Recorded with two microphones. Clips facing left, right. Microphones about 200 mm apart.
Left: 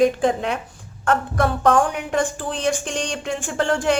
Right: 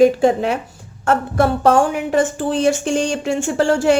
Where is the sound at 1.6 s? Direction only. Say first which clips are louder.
Right 2 dB; 25° right (ahead or behind).